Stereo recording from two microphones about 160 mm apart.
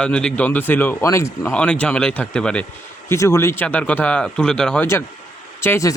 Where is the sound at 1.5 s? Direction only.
5° left (ahead or behind).